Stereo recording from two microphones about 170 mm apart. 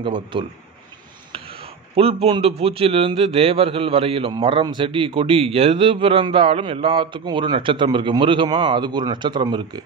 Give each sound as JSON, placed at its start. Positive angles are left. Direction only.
{"t": 0.0, "sound": "a man's voice", "side_deg": -30}
{"t": 2.0, "sound": "a man's voice", "side_deg": -35}